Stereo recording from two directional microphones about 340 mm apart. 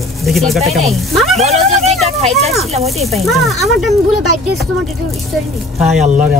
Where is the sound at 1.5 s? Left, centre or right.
Centre.